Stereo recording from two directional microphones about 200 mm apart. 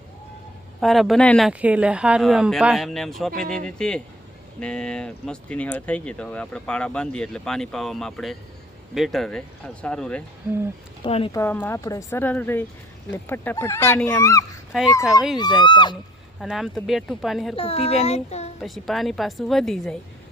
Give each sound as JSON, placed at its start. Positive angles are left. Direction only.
{"t": 0.8, "sound": "speech", "side_deg": 0}
{"t": 11.0, "sound": "speech", "side_deg": 25}
{"t": 11.3, "sound": "speech", "side_deg": 10}
{"t": 14.7, "sound": "a child's voice", "side_deg": 0}
{"t": 15.4, "sound": "speech", "side_deg": 20}
{"t": 16.4, "sound": "speech", "side_deg": 0}
{"t": 17.6, "sound": "a child's voice", "side_deg": 30}
{"t": 18.6, "sound": "speech", "side_deg": 0}